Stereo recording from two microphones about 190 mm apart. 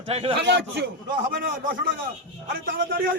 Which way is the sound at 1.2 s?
50° right (ahead or behind).